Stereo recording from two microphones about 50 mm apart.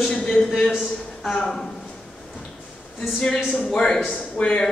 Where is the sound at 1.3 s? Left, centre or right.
Centre.